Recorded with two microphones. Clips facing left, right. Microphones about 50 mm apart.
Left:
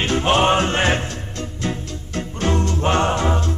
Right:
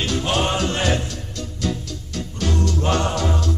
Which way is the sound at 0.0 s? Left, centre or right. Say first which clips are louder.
Left 5 dB; left.